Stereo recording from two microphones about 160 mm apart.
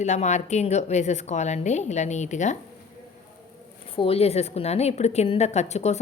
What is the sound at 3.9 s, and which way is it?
A woman's voice, 35° left (ahead or behind).